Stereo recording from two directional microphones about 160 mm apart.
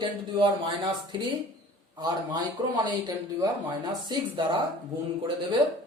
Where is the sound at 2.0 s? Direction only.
25° right (ahead or behind).